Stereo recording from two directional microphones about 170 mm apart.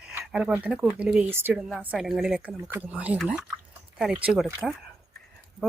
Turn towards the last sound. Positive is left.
turn(degrees=-5)  # may be behind; listen again after turning